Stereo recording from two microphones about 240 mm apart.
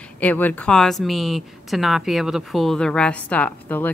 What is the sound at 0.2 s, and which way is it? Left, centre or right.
A woman's voice, centre.